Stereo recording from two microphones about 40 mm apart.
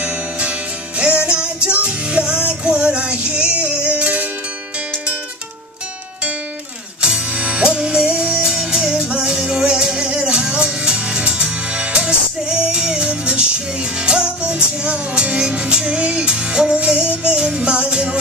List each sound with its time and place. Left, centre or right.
0.0 s music: right
7.0 s music: right
7.2 s music: right